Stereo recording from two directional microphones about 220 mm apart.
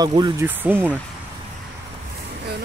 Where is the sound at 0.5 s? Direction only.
10° right (ahead or behind).